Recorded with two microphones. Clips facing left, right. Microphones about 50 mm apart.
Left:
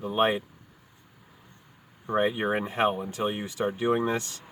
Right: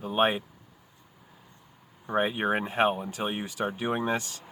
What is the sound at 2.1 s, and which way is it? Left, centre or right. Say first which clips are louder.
Speech: left 1 dB; right.